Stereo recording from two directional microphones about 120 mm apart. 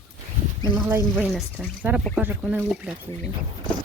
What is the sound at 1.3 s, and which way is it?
Speech, centre (ahead or behind).